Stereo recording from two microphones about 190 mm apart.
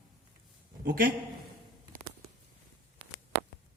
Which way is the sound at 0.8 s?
55° right (ahead or behind).